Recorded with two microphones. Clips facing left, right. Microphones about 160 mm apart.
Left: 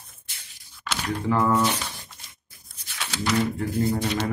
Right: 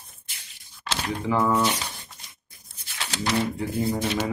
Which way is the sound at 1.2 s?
5° right (ahead or behind).